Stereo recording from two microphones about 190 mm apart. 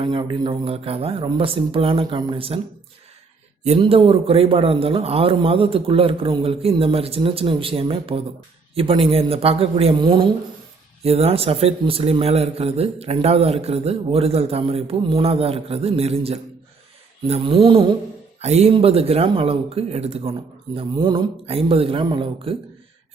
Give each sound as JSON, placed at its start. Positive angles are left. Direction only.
{"t": 0.0, "sound": "a man's voice", "side_deg": -25}
{"t": 3.6, "sound": "a man's voice", "side_deg": -35}